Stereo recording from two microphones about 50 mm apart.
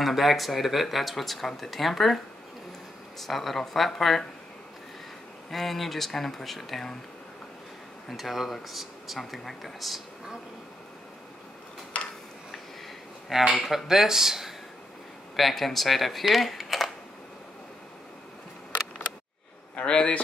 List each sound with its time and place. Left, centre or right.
0.0 s speech: centre
3.2 s speech: centre
5.5 s speech: centre
8.1 s speech: centre
11.9 s tick-tock: left
13.6 s speech: centre
19.7 s a sound: centre